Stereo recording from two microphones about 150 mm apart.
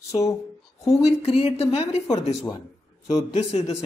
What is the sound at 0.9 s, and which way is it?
Speech, 45° left (ahead or behind).